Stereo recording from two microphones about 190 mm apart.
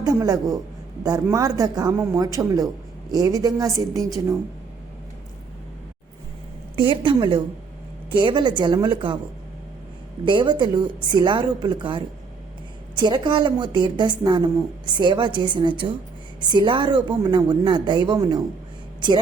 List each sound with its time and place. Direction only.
0.0 s speech: 20° right (ahead or behind)
6.7 s speech: 25° right (ahead or behind)
10.2 s speech: 25° right (ahead or behind)